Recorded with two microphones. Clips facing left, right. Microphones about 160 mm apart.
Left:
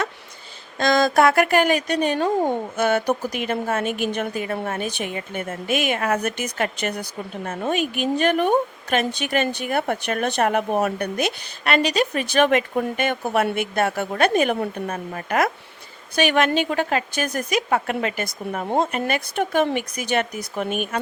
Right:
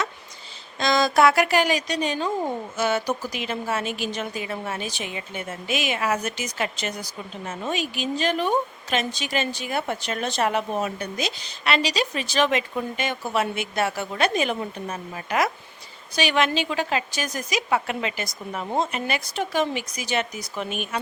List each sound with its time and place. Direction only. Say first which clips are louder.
0.8 s a woman's voice: left 2 dB; 50° left (ahead or behind)
2.4 s speech: left 5 dB; 30° left (ahead or behind)
2.7 s a woman's voice: left 2 dB; 55° left (ahead or behind)